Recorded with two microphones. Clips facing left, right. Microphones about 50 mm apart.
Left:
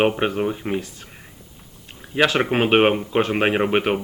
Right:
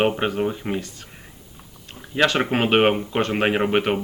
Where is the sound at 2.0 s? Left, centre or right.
Centre.